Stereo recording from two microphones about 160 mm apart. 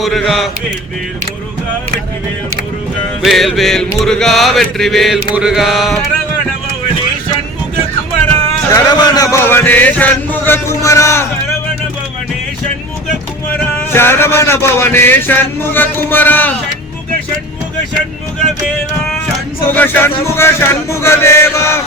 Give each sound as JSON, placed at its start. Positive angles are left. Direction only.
{"t": 0.0, "sound": "music", "side_deg": 0}
{"t": 3.2, "sound": "music", "side_deg": 0}
{"t": 8.7, "sound": "speech", "side_deg": 25}
{"t": 13.7, "sound": "speech", "side_deg": 15}
{"t": 19.6, "sound": "speech", "side_deg": 10}